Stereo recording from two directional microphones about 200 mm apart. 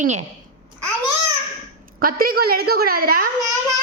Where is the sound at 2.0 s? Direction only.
50° right (ahead or behind).